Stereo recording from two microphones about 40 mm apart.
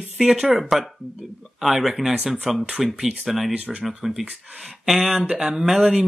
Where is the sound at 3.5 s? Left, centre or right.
Right.